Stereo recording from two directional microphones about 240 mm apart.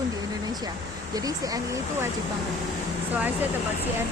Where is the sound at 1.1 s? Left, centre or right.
Centre.